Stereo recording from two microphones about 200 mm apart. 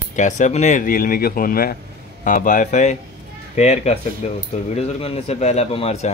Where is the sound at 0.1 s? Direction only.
35° left (ahead or behind).